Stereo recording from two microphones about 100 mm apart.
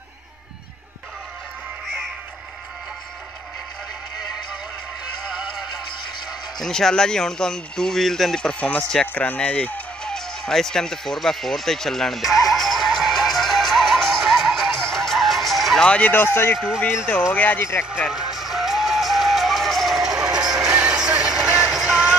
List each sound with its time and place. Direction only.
6.6 s a sound: 5° left (ahead or behind); by 16.5 s 25° left (ahead or behind)
16.5 s speech: 5° right (ahead or behind)
16.8 s speech: 20° left (ahead or behind)
18.0 s music: 5° right (ahead or behind)